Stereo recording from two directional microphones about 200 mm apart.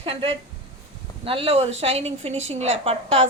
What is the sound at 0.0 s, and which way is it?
A woman's voice, 25° right (ahead or behind).